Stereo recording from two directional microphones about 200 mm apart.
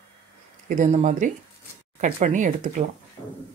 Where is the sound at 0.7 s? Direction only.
35° right (ahead or behind).